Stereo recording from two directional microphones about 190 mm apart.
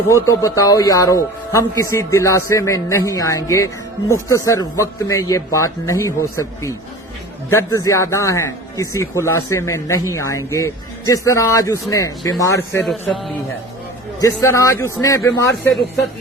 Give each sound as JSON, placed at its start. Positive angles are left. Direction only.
{"t": 0.1, "sound": "speech", "side_deg": 15}
{"t": 12.9, "sound": "a man's voice", "side_deg": 0}
{"t": 14.2, "sound": "speech", "side_deg": 15}